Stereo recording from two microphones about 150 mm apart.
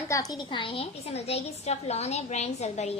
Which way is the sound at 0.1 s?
25° left (ahead or behind).